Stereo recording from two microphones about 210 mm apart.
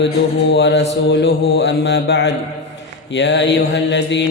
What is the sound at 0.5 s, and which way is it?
Mantra, 55° left (ahead or behind).